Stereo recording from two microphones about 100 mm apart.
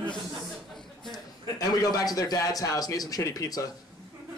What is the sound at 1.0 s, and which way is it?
A man's voice, 40° left (ahead or behind).